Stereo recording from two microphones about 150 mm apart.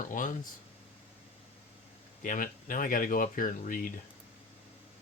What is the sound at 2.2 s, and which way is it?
Speech, 65° left (ahead or behind).